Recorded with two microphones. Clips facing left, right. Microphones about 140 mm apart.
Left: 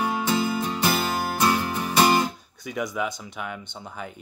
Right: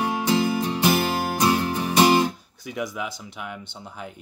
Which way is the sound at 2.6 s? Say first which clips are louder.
Left 2 dB; 5° right (ahead or behind).